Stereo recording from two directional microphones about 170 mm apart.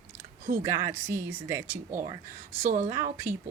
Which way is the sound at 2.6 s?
45° right (ahead or behind).